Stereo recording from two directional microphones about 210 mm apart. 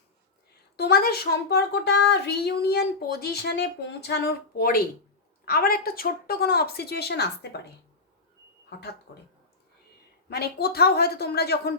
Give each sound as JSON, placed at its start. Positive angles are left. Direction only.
{"t": 0.8, "sound": "a woman's voice", "side_deg": 50}
{"t": 9.1, "sound": "a woman's voice", "side_deg": 55}
{"t": 10.2, "sound": "a woman's voice", "side_deg": 50}